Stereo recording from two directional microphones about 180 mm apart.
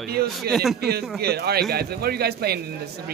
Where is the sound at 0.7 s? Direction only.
60° right (ahead or behind).